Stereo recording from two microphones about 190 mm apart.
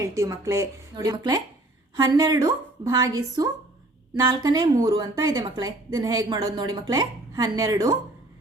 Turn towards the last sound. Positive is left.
turn(degrees=-20)  # may be behind; listen again after turning